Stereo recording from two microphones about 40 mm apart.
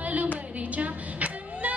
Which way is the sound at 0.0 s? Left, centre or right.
Right.